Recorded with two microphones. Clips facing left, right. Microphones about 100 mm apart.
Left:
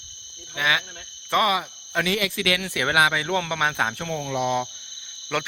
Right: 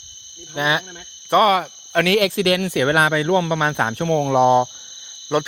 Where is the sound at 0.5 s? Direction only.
35° right (ahead or behind).